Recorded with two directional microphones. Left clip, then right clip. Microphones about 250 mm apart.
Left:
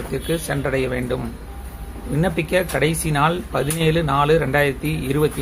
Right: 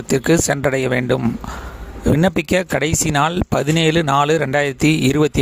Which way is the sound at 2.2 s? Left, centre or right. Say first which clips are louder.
Even; right.